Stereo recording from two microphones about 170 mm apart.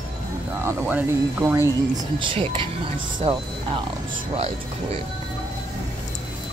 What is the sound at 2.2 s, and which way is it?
Speech, 30° right (ahead or behind).